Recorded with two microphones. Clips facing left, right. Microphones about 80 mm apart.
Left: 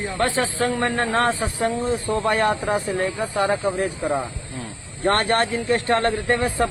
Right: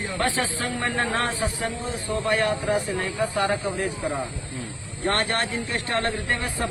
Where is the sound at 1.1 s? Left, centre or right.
Left.